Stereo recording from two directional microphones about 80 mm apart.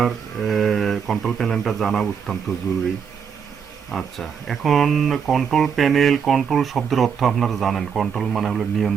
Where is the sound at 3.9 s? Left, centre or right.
Centre.